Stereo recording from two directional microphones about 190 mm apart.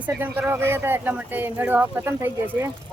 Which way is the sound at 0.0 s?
10° right (ahead or behind).